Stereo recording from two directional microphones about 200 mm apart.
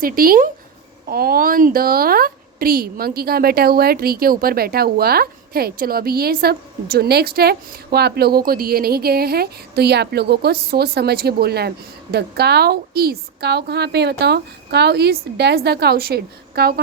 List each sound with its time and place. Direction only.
0.0 s a woman's voice: 45° right (ahead or behind)